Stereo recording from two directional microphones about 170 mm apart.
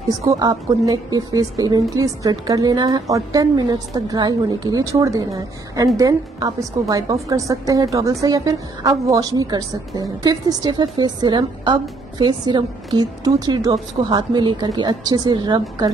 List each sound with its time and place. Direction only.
0.1 s a woman's voice: 20° right (ahead or behind)
5.9 s a woman's voice: 20° right (ahead or behind)